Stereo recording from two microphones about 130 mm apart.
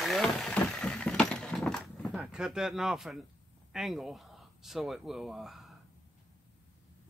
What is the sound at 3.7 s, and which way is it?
Speech, centre (ahead or behind).